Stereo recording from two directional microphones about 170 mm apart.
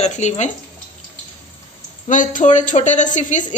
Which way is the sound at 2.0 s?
50° left (ahead or behind).